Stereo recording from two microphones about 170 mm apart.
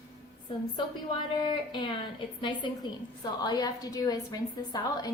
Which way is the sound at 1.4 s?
30° left (ahead or behind).